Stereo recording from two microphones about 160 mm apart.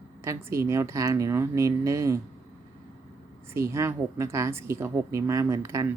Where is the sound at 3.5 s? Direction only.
15° right (ahead or behind).